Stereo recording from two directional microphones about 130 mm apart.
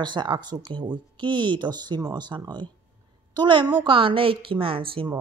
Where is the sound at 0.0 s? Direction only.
35° right (ahead or behind).